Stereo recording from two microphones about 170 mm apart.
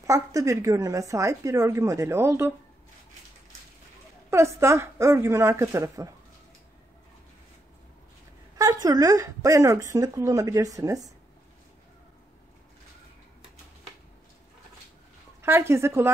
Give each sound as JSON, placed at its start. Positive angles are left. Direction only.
{"t": 0.0, "sound": "a woman's voice", "side_deg": -20}
{"t": 4.3, "sound": "a woman's voice", "side_deg": -15}
{"t": 8.5, "sound": "a woman's voice", "side_deg": -20}
{"t": 15.4, "sound": "a woman's voice", "side_deg": -15}